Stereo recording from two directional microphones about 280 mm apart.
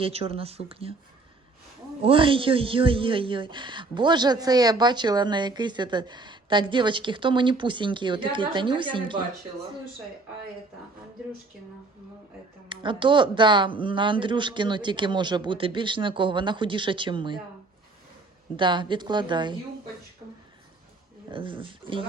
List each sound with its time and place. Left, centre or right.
0.0 s speech: right
2.0 s speech: centre
12.6 s speech: centre
18.5 s speech: centre
21.2 s speech: centre